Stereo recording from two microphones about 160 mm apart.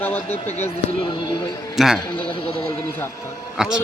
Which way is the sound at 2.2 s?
30° left (ahead or behind).